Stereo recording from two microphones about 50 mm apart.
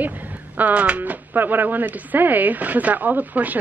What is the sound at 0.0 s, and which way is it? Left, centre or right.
A woman's voice, right.